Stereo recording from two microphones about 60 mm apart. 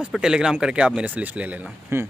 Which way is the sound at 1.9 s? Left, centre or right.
Right.